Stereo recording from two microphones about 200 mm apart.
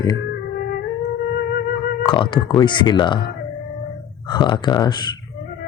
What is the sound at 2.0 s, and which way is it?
Speech, 25° left (ahead or behind).